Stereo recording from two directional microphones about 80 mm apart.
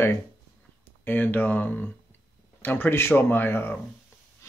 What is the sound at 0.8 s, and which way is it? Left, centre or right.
Speech, left.